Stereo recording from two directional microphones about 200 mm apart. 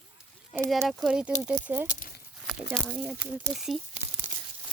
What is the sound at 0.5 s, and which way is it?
Speech, 5° right (ahead or behind).